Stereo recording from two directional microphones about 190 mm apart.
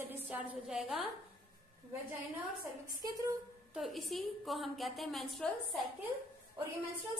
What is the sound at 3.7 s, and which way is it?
A woman's voice, centre (ahead or behind).